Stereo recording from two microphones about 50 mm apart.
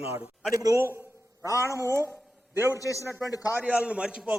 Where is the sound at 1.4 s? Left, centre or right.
Left.